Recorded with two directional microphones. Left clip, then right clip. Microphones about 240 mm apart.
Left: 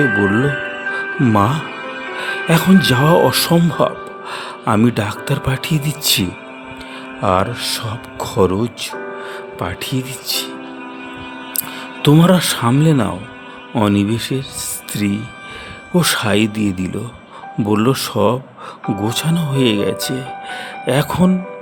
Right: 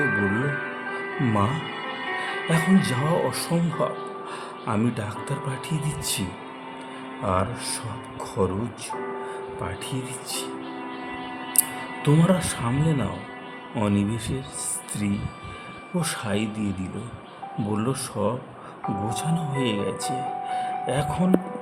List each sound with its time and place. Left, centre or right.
0.1 s speech: left
0.4 s music: left
1.7 s music: left
2.1 s music: left
2.5 s speech: left
12.0 s speech: left